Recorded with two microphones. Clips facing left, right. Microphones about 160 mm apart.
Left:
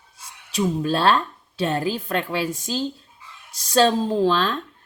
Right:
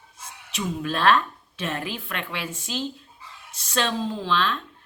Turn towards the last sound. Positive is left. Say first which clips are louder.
# left 6 dB
turn(degrees=40)  # may be behind; listen again after turning